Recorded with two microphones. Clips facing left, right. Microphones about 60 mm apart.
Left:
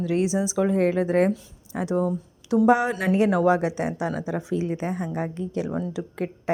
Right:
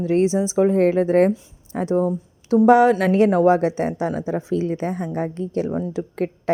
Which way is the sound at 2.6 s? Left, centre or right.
Right.